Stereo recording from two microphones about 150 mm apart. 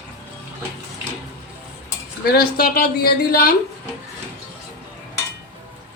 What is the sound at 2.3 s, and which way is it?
A woman's voice, 85° left.